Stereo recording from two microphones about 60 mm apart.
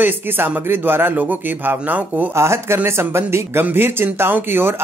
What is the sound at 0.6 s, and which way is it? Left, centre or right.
Speech, right.